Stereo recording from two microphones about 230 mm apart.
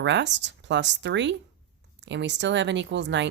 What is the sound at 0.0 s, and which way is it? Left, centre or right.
A woman's voice, right.